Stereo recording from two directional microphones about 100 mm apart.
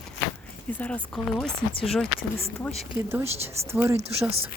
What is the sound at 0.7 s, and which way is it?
Speech, 15° left (ahead or behind).